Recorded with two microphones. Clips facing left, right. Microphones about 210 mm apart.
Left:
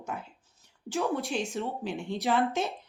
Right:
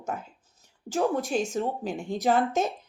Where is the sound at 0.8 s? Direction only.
45° right (ahead or behind).